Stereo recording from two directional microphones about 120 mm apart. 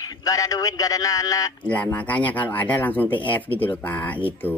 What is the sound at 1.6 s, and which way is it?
Speech, 10° left (ahead or behind).